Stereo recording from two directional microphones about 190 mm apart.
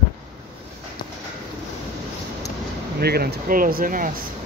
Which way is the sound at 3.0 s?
55° right (ahead or behind).